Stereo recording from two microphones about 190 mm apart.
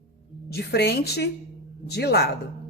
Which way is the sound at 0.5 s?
60° left (ahead or behind).